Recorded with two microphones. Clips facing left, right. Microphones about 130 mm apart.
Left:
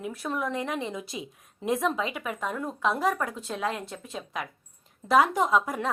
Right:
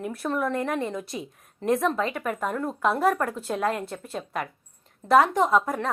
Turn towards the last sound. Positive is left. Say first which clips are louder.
# right 3 dB
turn(degrees=0)  # may be behind; listen again after turning